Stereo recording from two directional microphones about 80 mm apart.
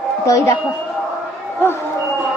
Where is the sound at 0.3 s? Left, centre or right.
Left.